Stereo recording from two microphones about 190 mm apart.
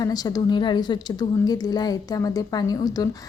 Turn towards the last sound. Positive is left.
turn(degrees=20)  # may be behind; listen again after turning